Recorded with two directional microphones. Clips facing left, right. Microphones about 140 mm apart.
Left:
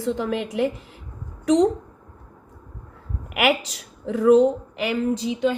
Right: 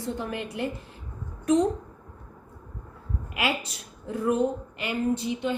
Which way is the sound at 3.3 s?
85° left.